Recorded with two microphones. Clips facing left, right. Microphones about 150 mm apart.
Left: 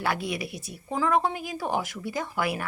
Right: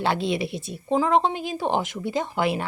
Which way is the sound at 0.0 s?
25° right (ahead or behind).